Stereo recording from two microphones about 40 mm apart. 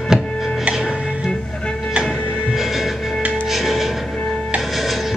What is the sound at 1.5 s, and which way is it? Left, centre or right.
Music, left.